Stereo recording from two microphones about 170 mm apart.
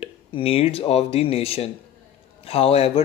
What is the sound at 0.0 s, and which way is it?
Speech, 35° left (ahead or behind).